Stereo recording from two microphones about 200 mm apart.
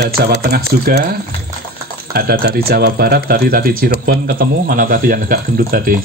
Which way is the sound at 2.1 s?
50° right (ahead or behind).